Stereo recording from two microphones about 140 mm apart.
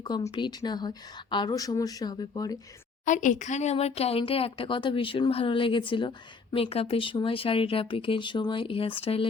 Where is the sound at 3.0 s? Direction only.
60° left (ahead or behind).